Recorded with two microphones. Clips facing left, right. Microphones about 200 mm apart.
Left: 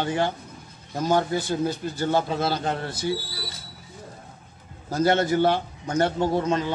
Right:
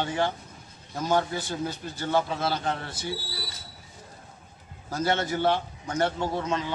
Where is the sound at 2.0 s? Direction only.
40° left (ahead or behind).